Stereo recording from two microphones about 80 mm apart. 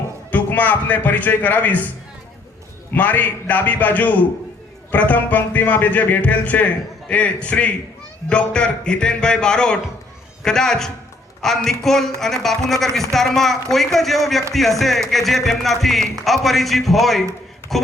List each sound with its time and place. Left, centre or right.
0.3 s a man's voice: left
2.9 s a man's voice: left; by 17.9 s centre